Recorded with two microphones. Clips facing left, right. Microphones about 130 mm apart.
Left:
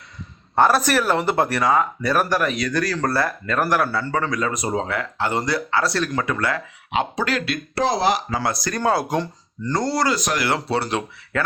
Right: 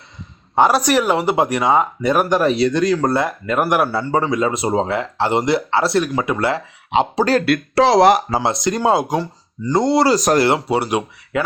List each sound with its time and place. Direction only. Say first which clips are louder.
0.5 s speech: right 3 dB; 15° right (ahead or behind)
6.0 s speech: right 4 dB; 15° right (ahead or behind); by 7.4 s 35° right (ahead or behind)
7.4 s speech: right 8 dB; 75° right (ahead or behind)
8.4 s speech: right 5 dB; 20° right (ahead or behind)
10.2 s speech: right 9 dB; 40° right (ahead or behind)
10.7 s speech: right 4 dB; 15° right (ahead or behind)